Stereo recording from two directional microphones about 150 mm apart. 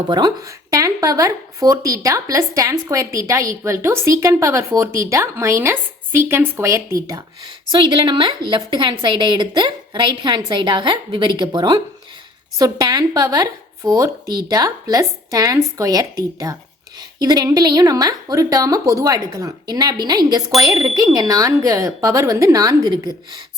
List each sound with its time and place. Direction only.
0.1 s speech: 30° right (ahead or behind)